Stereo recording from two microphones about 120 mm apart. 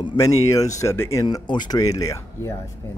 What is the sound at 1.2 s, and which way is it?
Speech, 40° left (ahead or behind).